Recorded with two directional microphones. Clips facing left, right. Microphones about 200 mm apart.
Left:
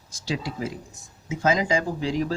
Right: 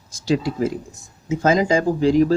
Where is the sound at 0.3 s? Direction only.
45° right (ahead or behind).